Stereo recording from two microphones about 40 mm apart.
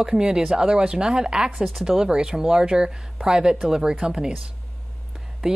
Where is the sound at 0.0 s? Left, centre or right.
Centre.